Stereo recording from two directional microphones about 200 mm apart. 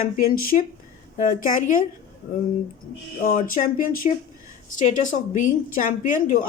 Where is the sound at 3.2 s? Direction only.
40° left (ahead or behind).